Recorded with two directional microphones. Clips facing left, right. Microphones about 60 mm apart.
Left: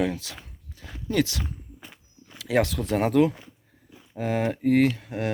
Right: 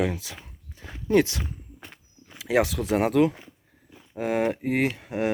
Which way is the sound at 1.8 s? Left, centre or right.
Right.